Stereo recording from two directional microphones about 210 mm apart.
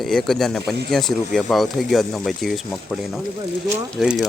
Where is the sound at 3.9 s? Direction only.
Centre (ahead or behind).